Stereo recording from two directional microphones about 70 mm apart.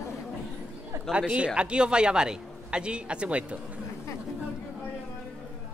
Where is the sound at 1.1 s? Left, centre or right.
Centre.